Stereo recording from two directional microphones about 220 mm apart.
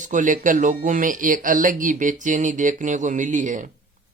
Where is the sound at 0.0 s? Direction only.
35° right (ahead or behind).